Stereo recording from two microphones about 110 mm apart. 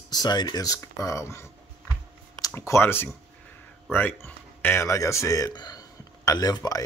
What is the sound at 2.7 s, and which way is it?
Speech, 20° left (ahead or behind).